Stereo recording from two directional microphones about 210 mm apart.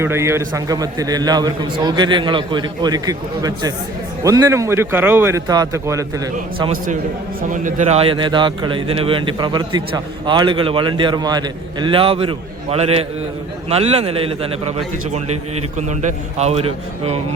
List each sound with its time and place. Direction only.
0.0 s a man's voice: 10° right (ahead or behind)
7.5 s a man's voice: 35° right (ahead or behind)
15.9 s a man's voice: 35° right (ahead or behind)